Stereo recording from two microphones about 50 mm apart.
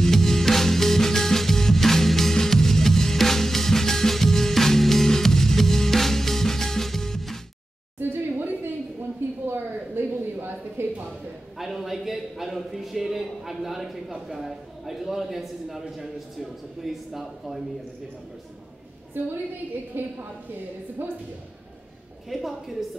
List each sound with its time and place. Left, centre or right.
0.0 s music: centre
8.0 s a sound: right
11.1 s a sound: centre
14.2 s a man's voice: centre
19.2 s a woman's voice: right
22.3 s a man's voice: centre